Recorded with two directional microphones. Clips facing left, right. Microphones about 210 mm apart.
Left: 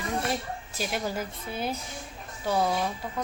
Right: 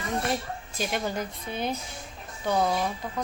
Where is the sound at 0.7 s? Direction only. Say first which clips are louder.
Right 1 dB; 5° left (ahead or behind).